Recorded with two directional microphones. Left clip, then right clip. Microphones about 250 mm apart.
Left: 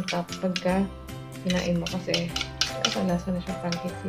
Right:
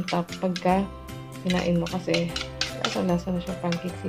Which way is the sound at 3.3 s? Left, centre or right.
Right.